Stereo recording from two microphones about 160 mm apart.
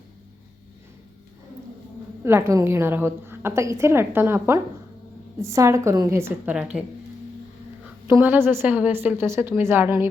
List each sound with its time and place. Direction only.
2.2 s a woman's voice: 15° right (ahead or behind)
8.0 s a woman's voice: 15° right (ahead or behind)